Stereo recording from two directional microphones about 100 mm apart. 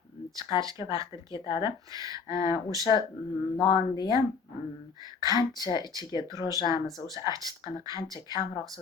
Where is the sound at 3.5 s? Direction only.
40° left (ahead or behind).